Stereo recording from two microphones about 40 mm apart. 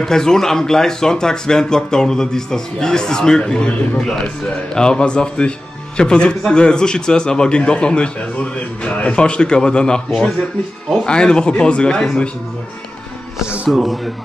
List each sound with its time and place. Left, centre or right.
0.0 s speech: centre
4.7 s a man's voice: left
13.7 s speech: centre